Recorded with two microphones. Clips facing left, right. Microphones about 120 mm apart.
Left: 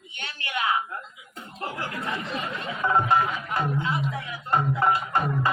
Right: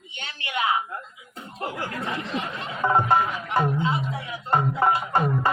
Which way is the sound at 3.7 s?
25° right (ahead or behind).